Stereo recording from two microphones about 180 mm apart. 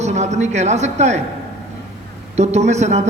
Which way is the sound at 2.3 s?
40° right (ahead or behind).